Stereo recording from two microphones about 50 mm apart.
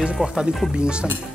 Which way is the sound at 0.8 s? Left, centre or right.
Centre.